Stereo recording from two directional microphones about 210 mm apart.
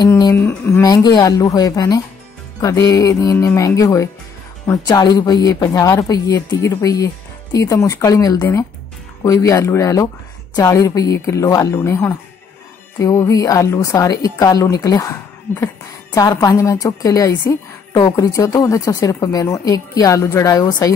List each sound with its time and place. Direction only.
0.0 s a woman's voice: 15° left (ahead or behind)